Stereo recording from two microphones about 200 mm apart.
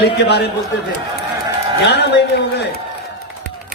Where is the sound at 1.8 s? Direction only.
55° left (ahead or behind).